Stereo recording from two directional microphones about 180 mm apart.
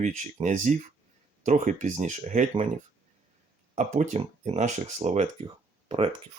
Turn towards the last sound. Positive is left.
turn(degrees=-30)  # may be behind; listen again after turning